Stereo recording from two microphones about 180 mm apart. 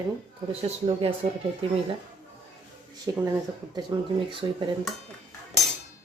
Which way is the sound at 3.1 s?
20° right (ahead or behind).